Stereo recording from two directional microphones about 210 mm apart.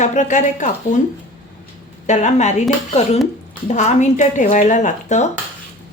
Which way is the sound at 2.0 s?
35° left (ahead or behind).